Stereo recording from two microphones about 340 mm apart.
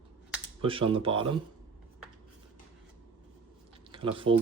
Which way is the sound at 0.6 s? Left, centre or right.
Centre.